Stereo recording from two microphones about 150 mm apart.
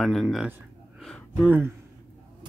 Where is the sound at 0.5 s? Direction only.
5° right (ahead or behind).